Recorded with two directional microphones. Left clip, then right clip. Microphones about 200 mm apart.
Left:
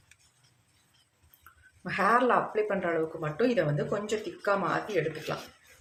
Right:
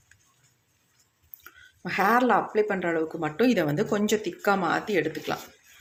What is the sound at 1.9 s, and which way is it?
Speech, 40° right (ahead or behind).